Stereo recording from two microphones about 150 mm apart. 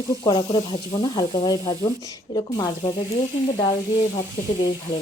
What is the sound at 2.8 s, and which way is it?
Speech, 40° left (ahead or behind).